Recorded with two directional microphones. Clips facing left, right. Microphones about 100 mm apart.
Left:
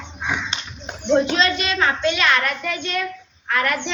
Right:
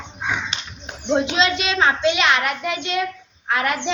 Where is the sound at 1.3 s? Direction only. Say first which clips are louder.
Right 1 dB; 20° right (ahead or behind).